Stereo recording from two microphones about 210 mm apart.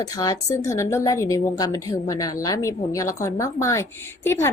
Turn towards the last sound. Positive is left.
turn(degrees=10)  # may be behind; listen again after turning